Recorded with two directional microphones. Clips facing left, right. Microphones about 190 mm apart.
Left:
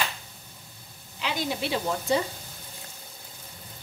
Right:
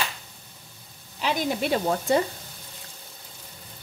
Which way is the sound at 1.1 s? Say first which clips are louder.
Right 4 dB; 50° right (ahead or behind).